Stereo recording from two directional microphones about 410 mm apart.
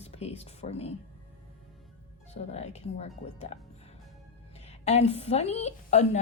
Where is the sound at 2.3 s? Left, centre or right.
Centre.